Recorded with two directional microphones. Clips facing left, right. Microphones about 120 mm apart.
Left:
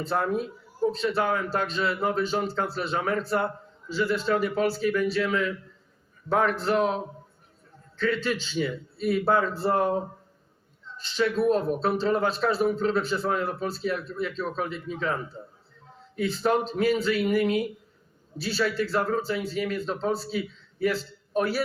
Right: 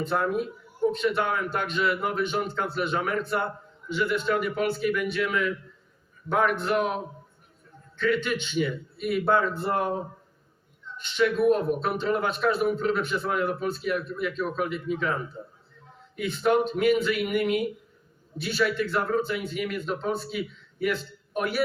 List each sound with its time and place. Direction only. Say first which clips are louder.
0.0 s speech: even; 35° left (ahead or behind)
16.1 s speech: right 1 dB; 35° left (ahead or behind)